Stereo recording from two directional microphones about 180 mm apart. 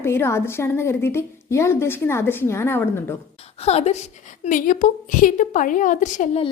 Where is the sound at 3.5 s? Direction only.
35° left (ahead or behind).